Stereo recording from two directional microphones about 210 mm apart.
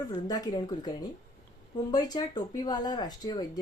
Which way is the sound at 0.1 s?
15° left (ahead or behind).